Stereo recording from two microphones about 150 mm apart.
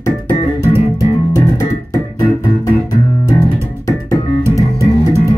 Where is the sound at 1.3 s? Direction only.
20° left (ahead or behind).